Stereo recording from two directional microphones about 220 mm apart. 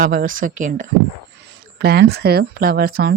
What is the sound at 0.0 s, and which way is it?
Speech, 40° right (ahead or behind).